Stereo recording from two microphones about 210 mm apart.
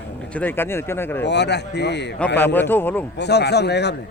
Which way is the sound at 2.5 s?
10° left (ahead or behind).